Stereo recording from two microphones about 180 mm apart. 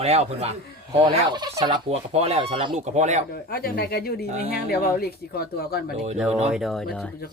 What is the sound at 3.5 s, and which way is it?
Speech, 60° left (ahead or behind).